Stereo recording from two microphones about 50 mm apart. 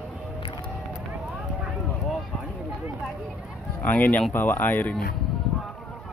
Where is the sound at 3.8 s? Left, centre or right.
Left.